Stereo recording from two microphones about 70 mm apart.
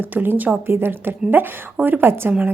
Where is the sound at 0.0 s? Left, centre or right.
Right.